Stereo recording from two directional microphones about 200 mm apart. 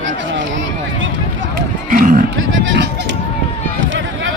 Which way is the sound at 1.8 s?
40° right (ahead or behind).